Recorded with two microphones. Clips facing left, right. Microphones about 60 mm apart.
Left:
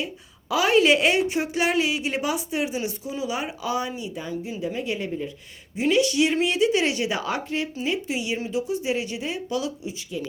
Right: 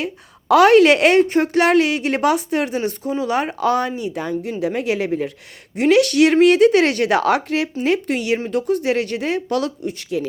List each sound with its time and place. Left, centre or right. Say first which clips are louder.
0.0 s a woman's voice: right 5 dB; right
1.2 s a woman's voice: right 8 dB; right
4.6 s a woman's voice: right 8 dB; right
7.9 s a woman's voice: right 9 dB; right